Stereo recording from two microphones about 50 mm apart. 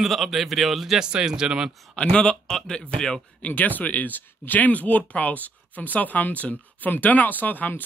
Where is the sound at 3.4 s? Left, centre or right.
Left.